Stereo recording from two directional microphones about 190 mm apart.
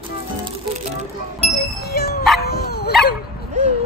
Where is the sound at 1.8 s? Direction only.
55° left (ahead or behind).